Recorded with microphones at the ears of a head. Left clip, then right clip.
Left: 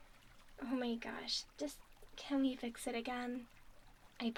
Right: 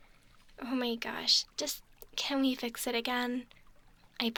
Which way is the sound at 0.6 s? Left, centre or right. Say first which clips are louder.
Right 7 dB; right.